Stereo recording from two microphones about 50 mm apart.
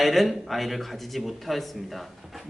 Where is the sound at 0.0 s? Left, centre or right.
Centre.